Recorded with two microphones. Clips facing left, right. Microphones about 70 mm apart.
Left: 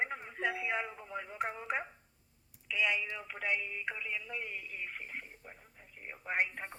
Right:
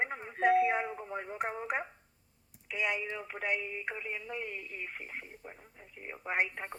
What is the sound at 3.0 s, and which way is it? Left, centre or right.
Speech, right.